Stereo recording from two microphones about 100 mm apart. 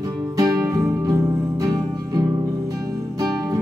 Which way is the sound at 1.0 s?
35° right (ahead or behind).